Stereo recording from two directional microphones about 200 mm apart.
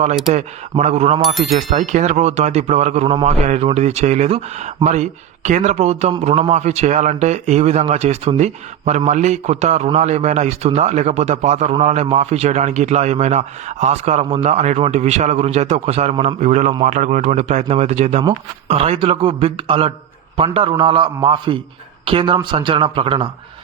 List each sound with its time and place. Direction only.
0.3 s speech: 35° right (ahead or behind)
1.2 s speech: centre (ahead or behind)
1.5 s a man's voice: 35° right (ahead or behind)